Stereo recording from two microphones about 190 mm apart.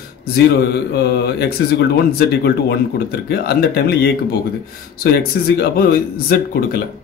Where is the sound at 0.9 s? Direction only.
60° left (ahead or behind).